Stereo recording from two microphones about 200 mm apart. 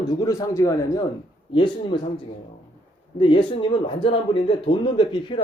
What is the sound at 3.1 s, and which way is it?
Speech, 25° left (ahead or behind).